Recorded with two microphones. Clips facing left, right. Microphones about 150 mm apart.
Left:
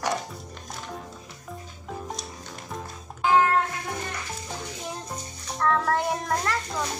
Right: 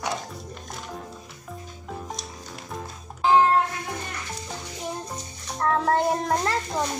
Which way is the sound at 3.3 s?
20° right (ahead or behind).